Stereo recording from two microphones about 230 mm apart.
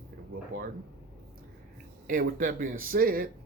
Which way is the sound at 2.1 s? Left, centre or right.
Right.